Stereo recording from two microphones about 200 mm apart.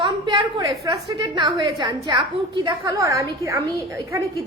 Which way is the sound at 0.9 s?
20° right (ahead or behind).